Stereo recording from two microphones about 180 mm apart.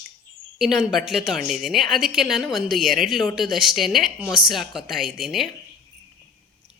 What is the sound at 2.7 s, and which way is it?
Speech, 50° right (ahead or behind).